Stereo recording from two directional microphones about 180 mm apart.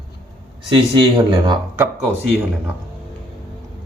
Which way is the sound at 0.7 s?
25° right (ahead or behind).